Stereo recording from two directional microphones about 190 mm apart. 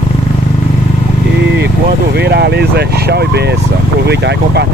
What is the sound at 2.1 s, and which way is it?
Speech, 60° right (ahead or behind).